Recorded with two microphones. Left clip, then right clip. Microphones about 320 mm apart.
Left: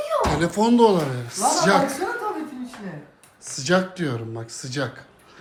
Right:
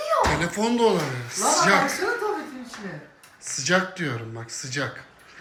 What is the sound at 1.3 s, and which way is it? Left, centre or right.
Speech, left.